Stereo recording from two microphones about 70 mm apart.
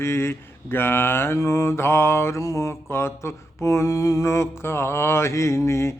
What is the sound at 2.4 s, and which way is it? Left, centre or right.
Mantra, left.